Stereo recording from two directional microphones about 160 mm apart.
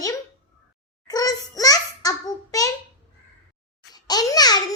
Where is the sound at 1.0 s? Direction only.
25° left (ahead or behind).